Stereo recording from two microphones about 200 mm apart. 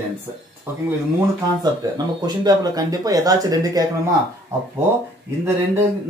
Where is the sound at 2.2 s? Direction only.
20° right (ahead or behind).